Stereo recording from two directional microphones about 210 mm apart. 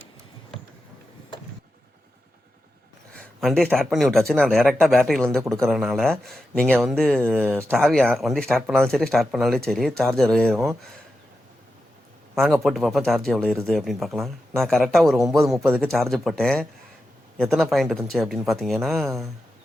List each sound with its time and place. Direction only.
3.2 s speech: 5° left (ahead or behind)
12.4 s speech: centre (ahead or behind)